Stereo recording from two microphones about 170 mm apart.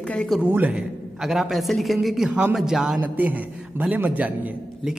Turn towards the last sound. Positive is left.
turn(degrees=-10)  # may be behind; listen again after turning